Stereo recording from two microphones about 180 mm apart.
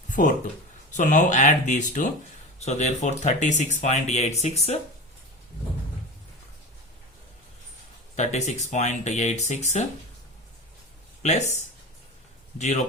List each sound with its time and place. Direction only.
0.1 s speech: 45° left (ahead or behind)
8.1 s speech: 40° left (ahead or behind)
11.2 s speech: 40° left (ahead or behind)
12.5 s speech: 40° left (ahead or behind)